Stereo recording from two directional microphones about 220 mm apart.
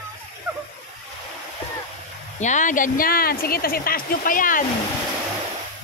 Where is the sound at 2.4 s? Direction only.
35° left (ahead or behind).